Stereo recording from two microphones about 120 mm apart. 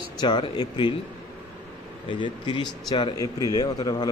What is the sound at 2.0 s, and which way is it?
Speech, 40° left (ahead or behind).